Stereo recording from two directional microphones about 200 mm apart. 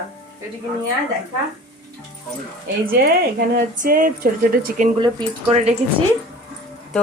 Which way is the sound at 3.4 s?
45° right (ahead or behind).